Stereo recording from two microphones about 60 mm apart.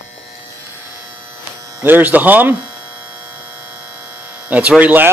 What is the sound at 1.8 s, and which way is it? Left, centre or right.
Speech, right.